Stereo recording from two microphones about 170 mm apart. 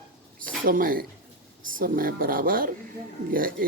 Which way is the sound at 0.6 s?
55° right (ahead or behind).